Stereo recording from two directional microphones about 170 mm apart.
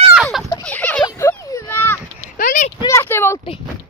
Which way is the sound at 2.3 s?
55° left (ahead or behind).